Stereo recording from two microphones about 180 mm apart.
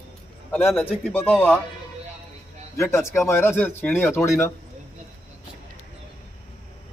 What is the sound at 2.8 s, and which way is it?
Speech, 15° left (ahead or behind).